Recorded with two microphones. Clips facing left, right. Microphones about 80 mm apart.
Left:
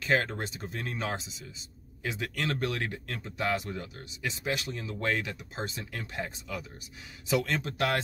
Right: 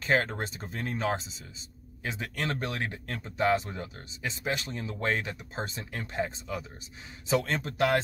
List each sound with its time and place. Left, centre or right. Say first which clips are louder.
0.0 s speech: right 1 dB; right